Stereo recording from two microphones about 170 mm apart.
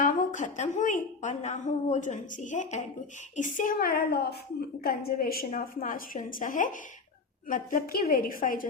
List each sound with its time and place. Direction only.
0.0 s a woman's voice: 50° left (ahead or behind)